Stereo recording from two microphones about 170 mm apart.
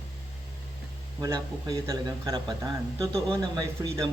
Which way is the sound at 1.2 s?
20° right (ahead or behind).